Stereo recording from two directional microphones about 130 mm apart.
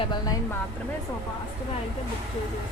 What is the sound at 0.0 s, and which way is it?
Speech, 35° left (ahead or behind).